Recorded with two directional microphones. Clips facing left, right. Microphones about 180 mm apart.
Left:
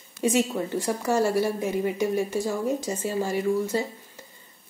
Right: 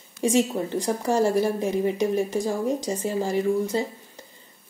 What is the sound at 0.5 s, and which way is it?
Speech, 20° right (ahead or behind).